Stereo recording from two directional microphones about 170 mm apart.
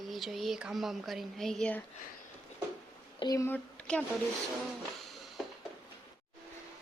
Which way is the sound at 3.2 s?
20° left (ahead or behind).